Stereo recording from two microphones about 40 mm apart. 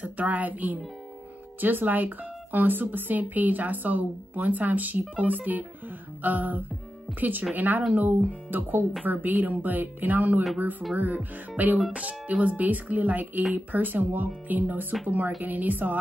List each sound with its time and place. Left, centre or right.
0.0 s speech: right